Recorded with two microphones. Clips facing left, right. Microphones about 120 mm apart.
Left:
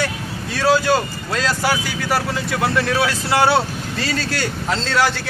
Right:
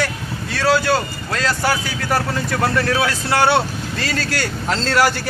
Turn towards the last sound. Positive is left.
turn(degrees=-5)  # may be behind; listen again after turning